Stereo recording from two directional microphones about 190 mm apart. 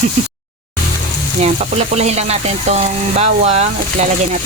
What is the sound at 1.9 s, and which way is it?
Frying, 35° right (ahead or behind).